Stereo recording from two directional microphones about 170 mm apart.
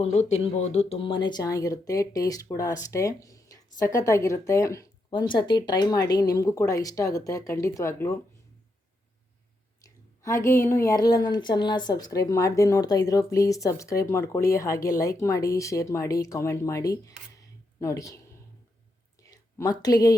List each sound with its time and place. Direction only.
0.0 s speech: 40° left (ahead or behind); by 8.2 s 15° left (ahead or behind)
9.8 s speech: 15° left (ahead or behind)
19.3 s a sound: 20° left (ahead or behind)
19.8 s speech: 20° left (ahead or behind)